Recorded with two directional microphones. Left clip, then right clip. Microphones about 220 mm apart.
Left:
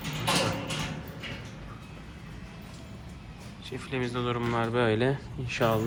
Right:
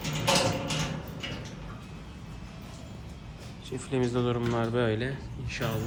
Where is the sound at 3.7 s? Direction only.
10° right (ahead or behind).